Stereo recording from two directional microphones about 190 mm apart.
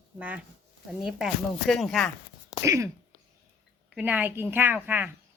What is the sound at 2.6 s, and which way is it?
A woman's voice, 15° right (ahead or behind).